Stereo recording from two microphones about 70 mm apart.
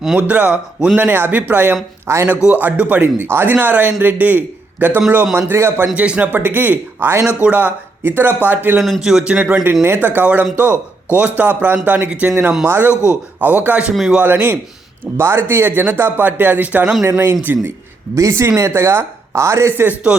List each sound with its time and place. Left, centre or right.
0.2 s speech: right
2.1 s speech: right
2.4 s a man's voice: right
5.3 s speech: right
5.9 s speech: centre
8.8 s a man's voice: centre; by 9.6 s right
9.8 s speech: right
12.6 s speech: right
13.1 s speech: right
17.0 s speech: right
19.7 s speech: right